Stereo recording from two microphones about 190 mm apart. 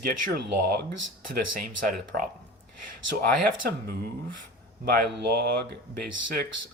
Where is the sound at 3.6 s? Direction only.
55° right (ahead or behind).